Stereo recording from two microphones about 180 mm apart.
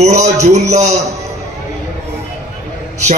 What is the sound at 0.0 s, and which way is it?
A man's voice, 40° right (ahead or behind).